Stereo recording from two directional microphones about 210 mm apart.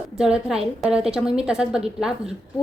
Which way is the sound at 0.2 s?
5° right (ahead or behind).